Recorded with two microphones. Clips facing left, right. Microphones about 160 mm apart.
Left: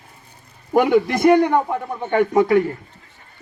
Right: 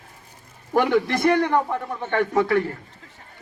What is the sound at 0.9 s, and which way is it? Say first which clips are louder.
Speech: left 4 dB; centre (ahead or behind).